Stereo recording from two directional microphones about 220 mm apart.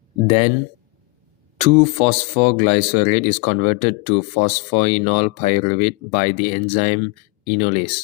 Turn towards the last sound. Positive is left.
turn(degrees=25)  # may be behind; listen again after turning